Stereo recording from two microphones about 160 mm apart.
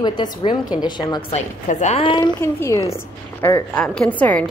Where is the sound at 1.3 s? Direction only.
45° left (ahead or behind); by 2.3 s 30° left (ahead or behind).